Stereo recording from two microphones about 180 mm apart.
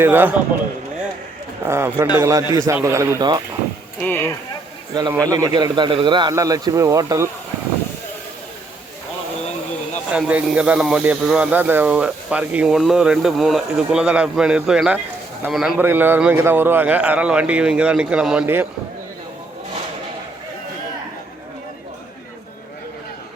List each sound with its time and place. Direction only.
0.0 s speech: 10° right (ahead or behind)
1.6 s speech: 15° right (ahead or behind)
4.0 s speech: 10° left (ahead or behind)
4.9 s a man's voice: 20° right (ahead or behind)
10.1 s speech: 5° right (ahead or behind)
15.8 s speech: 10° right (ahead or behind)